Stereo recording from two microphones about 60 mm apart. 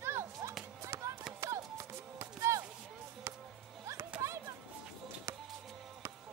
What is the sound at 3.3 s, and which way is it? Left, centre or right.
Music, right.